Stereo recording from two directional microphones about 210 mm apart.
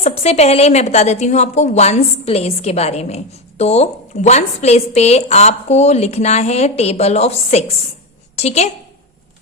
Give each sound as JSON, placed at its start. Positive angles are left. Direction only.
{"t": 0.0, "sound": "speech", "side_deg": 30}